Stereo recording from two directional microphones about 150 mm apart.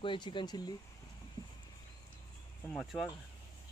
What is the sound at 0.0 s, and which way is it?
Speech, 35° left (ahead or behind).